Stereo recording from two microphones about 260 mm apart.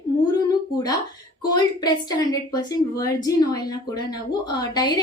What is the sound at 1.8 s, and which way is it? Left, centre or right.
A woman's voice, centre.